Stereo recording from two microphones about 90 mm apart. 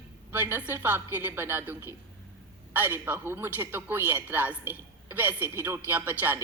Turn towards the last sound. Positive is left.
turn(degrees=-25)  # may be behind; listen again after turning